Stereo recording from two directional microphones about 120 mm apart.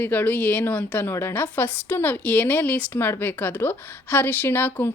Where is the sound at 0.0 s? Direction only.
15° left (ahead or behind).